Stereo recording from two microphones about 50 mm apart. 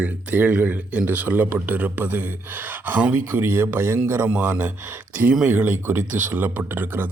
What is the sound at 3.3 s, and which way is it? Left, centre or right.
Speech, right.